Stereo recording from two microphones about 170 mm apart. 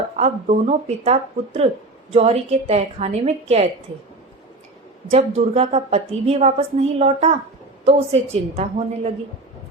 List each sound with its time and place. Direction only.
0.2 s a woman's voice: 40° right (ahead or behind)
5.1 s a woman's voice: 40° right (ahead or behind)